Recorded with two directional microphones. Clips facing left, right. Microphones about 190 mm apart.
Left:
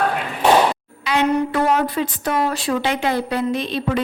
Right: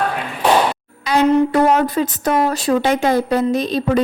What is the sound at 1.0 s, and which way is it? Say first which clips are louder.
A woman's voice: right 5 dB; 40° right (ahead or behind).